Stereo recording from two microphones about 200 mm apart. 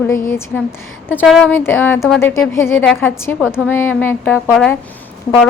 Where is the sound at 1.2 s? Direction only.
Centre (ahead or behind).